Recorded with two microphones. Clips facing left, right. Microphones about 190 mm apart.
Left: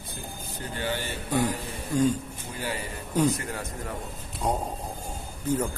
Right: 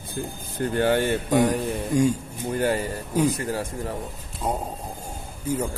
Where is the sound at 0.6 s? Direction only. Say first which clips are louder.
Right 11 dB; 55° right (ahead or behind).